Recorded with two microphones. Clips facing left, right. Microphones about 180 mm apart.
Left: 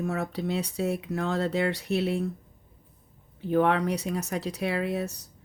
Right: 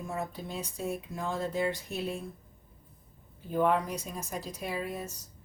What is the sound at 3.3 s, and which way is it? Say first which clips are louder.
Speech: left 4 dB; 75° left (ahead or behind).